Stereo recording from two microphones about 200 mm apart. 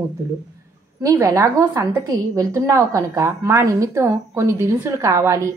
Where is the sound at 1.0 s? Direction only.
15° right (ahead or behind).